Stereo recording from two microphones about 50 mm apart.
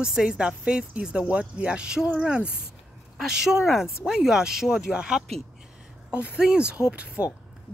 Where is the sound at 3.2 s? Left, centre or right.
Centre; by 7.2 s right.